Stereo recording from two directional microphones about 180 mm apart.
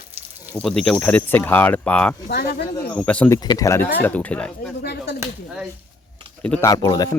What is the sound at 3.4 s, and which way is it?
Speech, 20° left (ahead or behind).